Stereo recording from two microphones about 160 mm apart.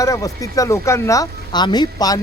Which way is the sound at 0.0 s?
20° left (ahead or behind).